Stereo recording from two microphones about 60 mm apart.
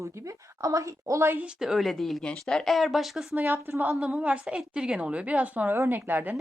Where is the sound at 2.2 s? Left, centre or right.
Centre.